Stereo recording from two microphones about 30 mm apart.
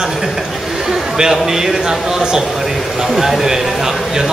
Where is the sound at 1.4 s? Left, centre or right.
Centre.